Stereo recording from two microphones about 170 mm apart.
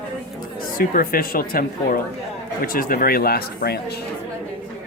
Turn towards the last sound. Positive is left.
turn(degrees=65)  # may be behind; listen again after turning